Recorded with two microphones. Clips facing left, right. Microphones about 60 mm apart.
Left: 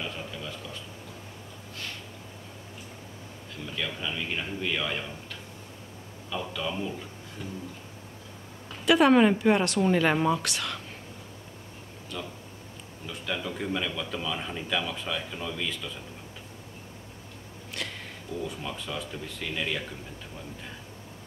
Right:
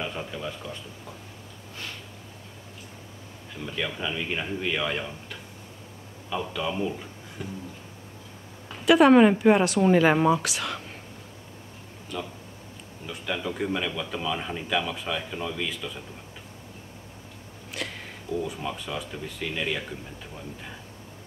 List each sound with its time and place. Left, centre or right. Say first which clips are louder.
0.0 s a sound: right 4 dB; centre
3.5 s a man's voice: right 3 dB; centre
8.6 s speech: right 3 dB; centre
12.1 s speech: right 3 dB; centre
17.7 s speech: right 2 dB; centre